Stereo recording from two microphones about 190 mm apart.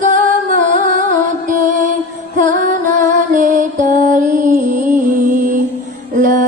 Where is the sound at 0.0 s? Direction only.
45° right (ahead or behind).